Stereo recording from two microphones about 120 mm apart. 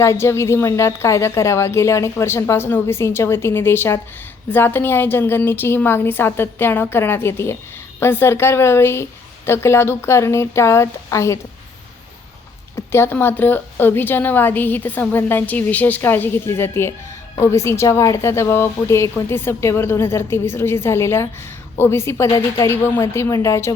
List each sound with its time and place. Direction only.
0.0 s a woman's voice: 20° left (ahead or behind)
12.7 s a woman's voice: 20° left (ahead or behind)